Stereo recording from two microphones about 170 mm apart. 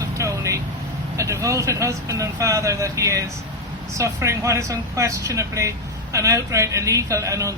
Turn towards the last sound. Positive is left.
turn(degrees=-20)  # may be behind; listen again after turning